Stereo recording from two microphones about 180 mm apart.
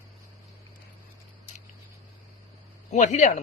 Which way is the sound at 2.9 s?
40° left (ahead or behind).